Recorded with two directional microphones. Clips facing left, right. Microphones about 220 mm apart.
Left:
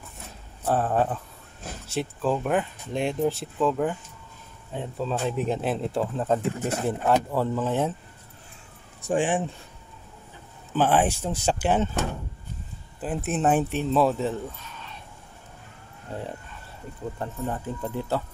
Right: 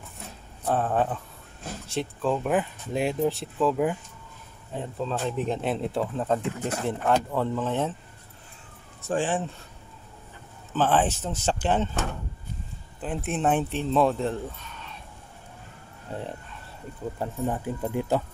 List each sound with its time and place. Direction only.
0.7 s speech: 5° left (ahead or behind)
9.0 s speech: 15° left (ahead or behind)
10.7 s speech: 10° left (ahead or behind)
13.0 s speech: 5° left (ahead or behind)
17.2 s speech: 10° right (ahead or behind)